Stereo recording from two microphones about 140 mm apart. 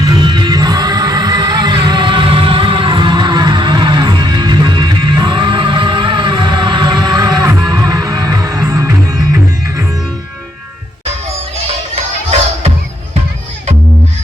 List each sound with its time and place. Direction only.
0.0 s music: 30° right (ahead or behind)